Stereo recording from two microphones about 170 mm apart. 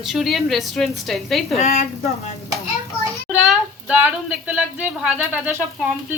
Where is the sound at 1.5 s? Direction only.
40° left (ahead or behind).